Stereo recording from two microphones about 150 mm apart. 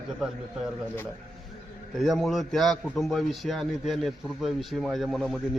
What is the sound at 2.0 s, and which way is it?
A man's voice, centre (ahead or behind).